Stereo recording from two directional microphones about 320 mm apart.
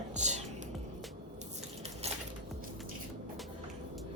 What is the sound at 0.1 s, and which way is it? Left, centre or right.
Music, right.